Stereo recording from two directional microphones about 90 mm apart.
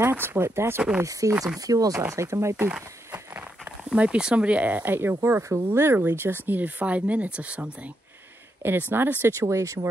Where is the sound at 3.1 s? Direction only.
20° right (ahead or behind).